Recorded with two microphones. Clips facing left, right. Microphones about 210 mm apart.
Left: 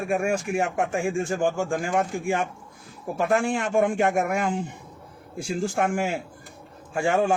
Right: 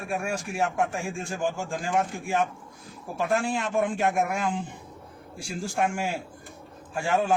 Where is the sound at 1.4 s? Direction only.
50° left (ahead or behind).